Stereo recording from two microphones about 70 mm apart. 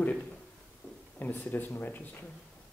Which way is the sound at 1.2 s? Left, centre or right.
Left.